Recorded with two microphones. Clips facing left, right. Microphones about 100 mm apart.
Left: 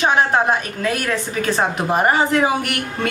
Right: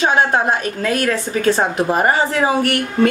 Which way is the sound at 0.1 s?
35° right (ahead or behind).